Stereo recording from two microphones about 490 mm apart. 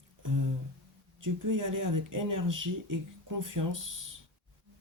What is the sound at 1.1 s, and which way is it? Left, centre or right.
Speech, right.